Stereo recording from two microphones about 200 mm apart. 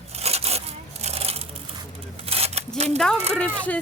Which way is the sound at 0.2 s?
30° right (ahead or behind).